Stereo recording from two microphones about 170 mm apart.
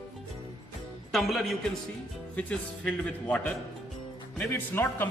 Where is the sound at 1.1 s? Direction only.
Centre (ahead or behind).